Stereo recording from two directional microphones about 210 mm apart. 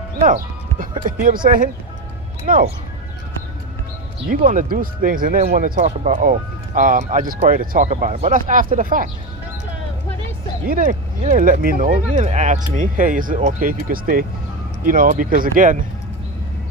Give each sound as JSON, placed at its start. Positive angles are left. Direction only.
{"t": 0.2, "sound": "speech", "side_deg": -40}
{"t": 4.3, "sound": "speech", "side_deg": -40}
{"t": 10.7, "sound": "speech", "side_deg": -40}